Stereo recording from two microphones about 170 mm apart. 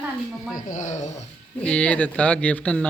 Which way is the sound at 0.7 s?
45° left (ahead or behind).